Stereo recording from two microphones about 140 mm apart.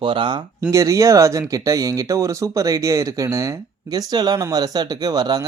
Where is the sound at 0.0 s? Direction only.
35° right (ahead or behind).